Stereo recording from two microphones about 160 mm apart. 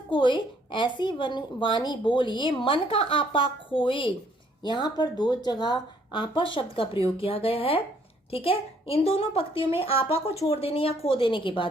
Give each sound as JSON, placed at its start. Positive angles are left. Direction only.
{"t": 0.1, "sound": "a woman's voice", "side_deg": 30}